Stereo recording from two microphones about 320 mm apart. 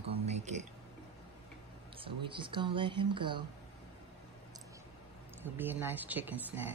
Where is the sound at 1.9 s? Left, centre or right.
Centre.